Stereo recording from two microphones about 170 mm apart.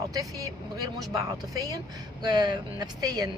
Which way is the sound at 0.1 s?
20° right (ahead or behind).